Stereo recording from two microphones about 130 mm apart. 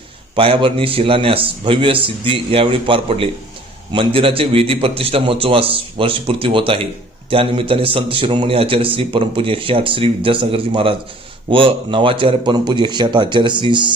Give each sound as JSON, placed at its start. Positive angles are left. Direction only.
{"t": 0.3, "sound": "a man's voice", "side_deg": -45}